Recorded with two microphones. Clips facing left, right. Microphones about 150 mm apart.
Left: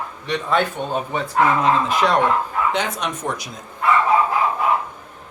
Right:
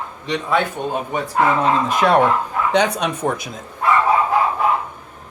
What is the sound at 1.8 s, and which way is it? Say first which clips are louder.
Speech: right 3 dB; 55° right (ahead or behind).